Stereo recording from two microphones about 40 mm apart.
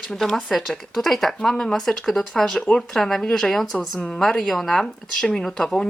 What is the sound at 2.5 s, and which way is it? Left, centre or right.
Speech, left.